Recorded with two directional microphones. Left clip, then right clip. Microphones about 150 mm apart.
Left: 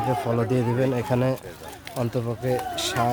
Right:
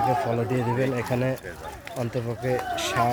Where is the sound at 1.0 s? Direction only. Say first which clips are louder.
Left 2 dB; 35° left (ahead or behind).